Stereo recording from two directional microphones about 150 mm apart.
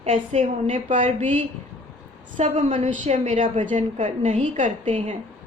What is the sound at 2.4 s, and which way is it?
A woman's voice, 50° right (ahead or behind).